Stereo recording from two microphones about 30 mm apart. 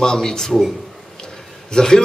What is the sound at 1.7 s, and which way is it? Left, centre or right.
Speech, left.